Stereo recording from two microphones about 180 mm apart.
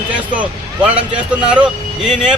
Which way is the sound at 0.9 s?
5° right (ahead or behind).